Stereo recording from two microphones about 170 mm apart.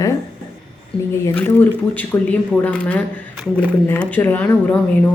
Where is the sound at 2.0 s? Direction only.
10° left (ahead or behind).